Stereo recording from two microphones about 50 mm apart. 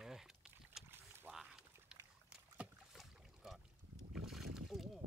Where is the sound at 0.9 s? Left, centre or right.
Right.